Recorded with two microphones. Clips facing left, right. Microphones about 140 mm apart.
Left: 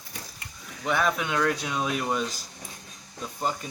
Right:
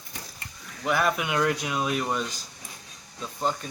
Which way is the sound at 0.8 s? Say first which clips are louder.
Right 1 dB; 5° right (ahead or behind).